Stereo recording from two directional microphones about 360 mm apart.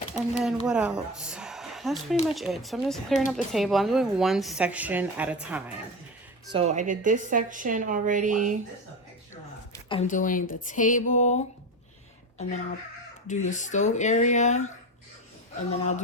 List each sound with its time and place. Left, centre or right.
0.1 s a woman's voice: centre
6.5 s a woman's voice: centre
9.7 s speech: centre
13.2 s speech: centre